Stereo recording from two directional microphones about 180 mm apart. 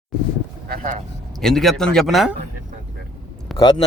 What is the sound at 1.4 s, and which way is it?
Speech, centre (ahead or behind).